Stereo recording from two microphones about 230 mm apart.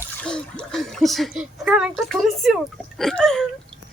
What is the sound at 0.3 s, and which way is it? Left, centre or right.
A woman's voice, centre.